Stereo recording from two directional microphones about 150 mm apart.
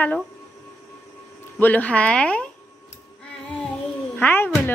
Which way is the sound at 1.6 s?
10° left (ahead or behind).